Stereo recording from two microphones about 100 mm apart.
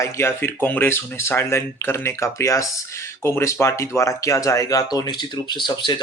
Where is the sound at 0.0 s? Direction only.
25° left (ahead or behind).